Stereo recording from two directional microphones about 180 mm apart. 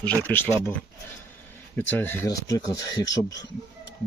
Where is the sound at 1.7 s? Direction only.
10° left (ahead or behind).